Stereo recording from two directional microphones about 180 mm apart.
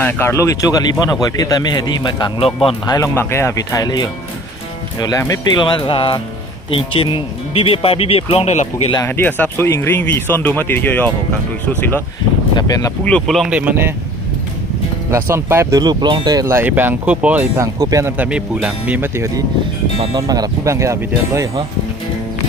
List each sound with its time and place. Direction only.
0.0 s speech: 10° left (ahead or behind); by 8.6 s 35° left (ahead or behind)
8.9 s speech: 15° left (ahead or behind)
12.5 s a sound: 20° left (ahead or behind)
13.1 s speech: 5° left (ahead or behind)
15.1 s speech: 15° right (ahead or behind)